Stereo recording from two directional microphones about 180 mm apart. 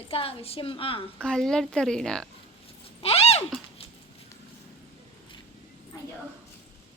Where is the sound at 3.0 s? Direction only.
35° left (ahead or behind).